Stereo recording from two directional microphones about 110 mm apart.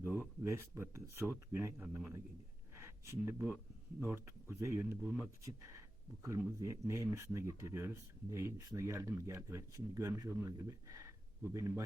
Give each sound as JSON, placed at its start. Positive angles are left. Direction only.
{"t": 0.2, "sound": "speech", "side_deg": -25}
{"t": 2.7, "sound": "a sound", "side_deg": -25}
{"t": 4.0, "sound": "speech", "side_deg": -25}
{"t": 6.2, "sound": "speech", "side_deg": -30}